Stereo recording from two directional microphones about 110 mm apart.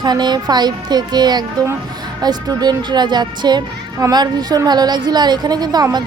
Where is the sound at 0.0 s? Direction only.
40° right (ahead or behind).